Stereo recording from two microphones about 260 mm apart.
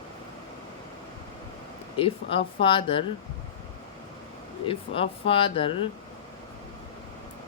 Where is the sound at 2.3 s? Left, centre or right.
Centre.